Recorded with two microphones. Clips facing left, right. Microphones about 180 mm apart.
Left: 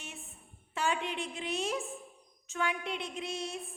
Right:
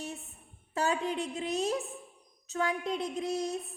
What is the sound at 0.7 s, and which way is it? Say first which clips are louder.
A woman's voice: right 3 dB; 40° right (ahead or behind).